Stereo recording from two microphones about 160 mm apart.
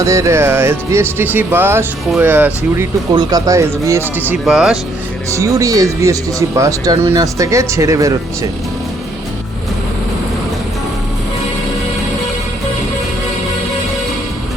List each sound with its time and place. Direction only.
0.0 s speech: 20° right (ahead or behind)
3.1 s speech: 25° right (ahead or behind)
4.4 s speech: 5° right (ahead or behind)
5.3 s speech: 20° right (ahead or behind)